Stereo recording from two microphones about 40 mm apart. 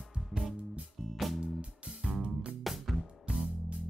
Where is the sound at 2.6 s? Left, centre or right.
Centre.